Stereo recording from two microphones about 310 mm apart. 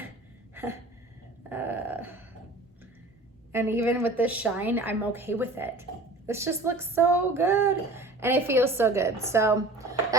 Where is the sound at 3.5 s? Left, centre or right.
Centre.